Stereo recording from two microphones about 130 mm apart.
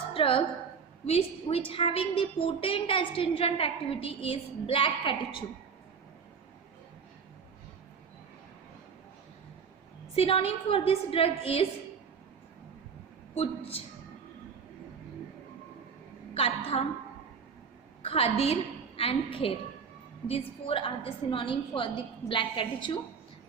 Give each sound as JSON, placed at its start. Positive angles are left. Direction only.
{"t": 0.1, "sound": "a woman's voice", "side_deg": 45}
{"t": 10.2, "sound": "a woman's voice", "side_deg": 50}
{"t": 13.3, "sound": "a woman's voice", "side_deg": 50}
{"t": 16.3, "sound": "a woman's voice", "side_deg": 50}
{"t": 18.0, "sound": "a woman's voice", "side_deg": 50}